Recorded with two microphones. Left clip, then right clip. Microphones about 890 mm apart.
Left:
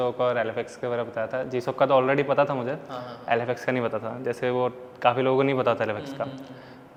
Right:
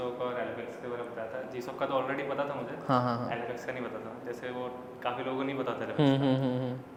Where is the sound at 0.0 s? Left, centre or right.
Left.